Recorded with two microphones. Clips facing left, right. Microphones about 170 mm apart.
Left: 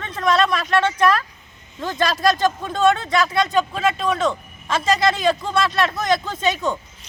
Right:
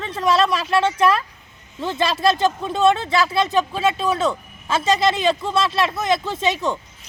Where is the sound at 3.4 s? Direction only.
5° right (ahead or behind).